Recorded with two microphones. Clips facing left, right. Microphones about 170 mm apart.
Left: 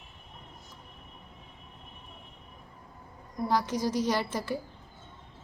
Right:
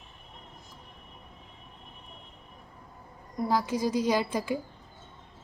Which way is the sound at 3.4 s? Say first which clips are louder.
Right 1 dB; 10° right (ahead or behind).